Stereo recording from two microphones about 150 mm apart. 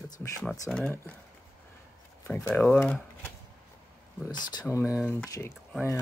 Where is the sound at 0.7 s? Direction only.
5° left (ahead or behind).